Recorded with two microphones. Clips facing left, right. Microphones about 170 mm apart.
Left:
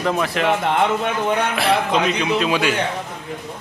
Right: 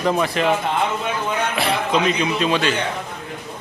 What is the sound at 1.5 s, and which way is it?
A man's voice, centre (ahead or behind).